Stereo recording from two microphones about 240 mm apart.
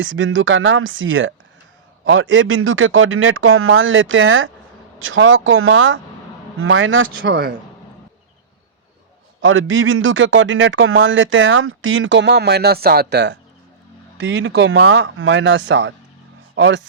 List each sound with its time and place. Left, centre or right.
0.0 s a man's voice: right
9.4 s a man's voice: right